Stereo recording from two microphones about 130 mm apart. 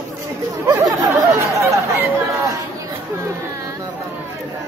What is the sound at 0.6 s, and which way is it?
Speech, 25° right (ahead or behind).